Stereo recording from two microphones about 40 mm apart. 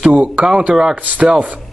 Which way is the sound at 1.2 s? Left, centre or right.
Right.